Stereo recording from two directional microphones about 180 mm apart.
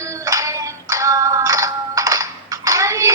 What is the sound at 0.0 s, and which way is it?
Music, 15° right (ahead or behind).